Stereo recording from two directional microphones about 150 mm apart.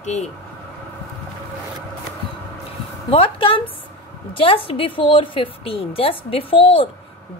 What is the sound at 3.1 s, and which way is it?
A woman's voice, 35° left (ahead or behind).